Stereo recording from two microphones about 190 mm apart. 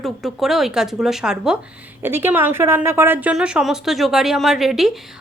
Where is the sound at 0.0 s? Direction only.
Centre (ahead or behind).